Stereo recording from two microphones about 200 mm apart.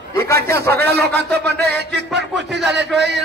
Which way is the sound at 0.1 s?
15° left (ahead or behind).